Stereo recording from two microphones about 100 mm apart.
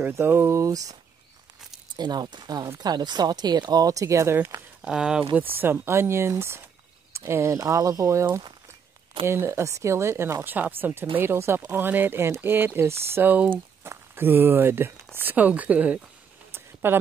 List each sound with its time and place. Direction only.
0.0 s speech: 25° right (ahead or behind)
2.0 s speech: 45° right (ahead or behind); by 4.6 s 25° right (ahead or behind)
4.8 s a woman's voice: 5° right (ahead or behind)
5.5 s a woman's voice: 20° right (ahead or behind)
16.5 s a sound: 20° right (ahead or behind)